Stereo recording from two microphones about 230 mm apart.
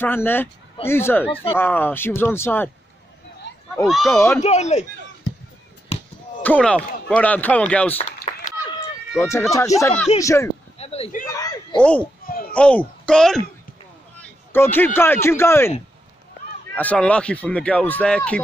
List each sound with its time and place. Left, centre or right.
0.0 s speech: centre
3.8 s speech: centre
4.4 s speech: left
6.4 s speech: centre
8.3 s a sound: left
9.2 s speech: centre
10.8 s a sound: left
11.2 s a sound: centre
11.8 s speech: centre
12.3 s babbling: left
12.5 s speech: centre
14.5 s speech: centre
16.7 s speech: centre